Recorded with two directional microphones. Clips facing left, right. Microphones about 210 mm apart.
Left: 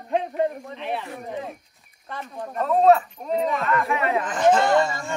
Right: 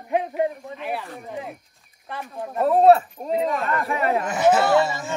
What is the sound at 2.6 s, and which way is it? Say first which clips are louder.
Speech: right 2 dB; 35° right (ahead or behind).